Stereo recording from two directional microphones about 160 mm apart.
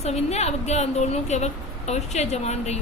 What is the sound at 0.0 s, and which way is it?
Speech, 40° left (ahead or behind).